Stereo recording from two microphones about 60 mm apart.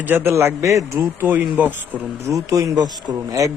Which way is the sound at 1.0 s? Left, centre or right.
Right.